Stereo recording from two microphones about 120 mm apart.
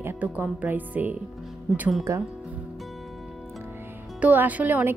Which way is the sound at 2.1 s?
25° right (ahead or behind).